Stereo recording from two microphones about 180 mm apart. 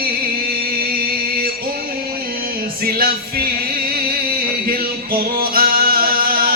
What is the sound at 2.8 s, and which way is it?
Music, 55° right (ahead or behind).